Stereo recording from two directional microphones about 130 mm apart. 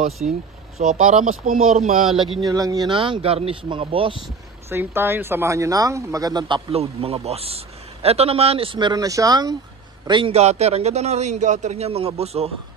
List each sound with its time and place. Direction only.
0.2 s a man's voice: 70° right (ahead or behind)
2.1 s speech: 40° right (ahead or behind)
4.6 s speech: 15° right (ahead or behind)
6.7 s a man's voice: 50° right (ahead or behind)
10.3 s a man's voice: 55° right (ahead or behind)